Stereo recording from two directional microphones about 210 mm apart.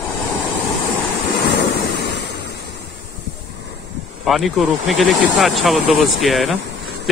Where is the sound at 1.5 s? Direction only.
55° left (ahead or behind).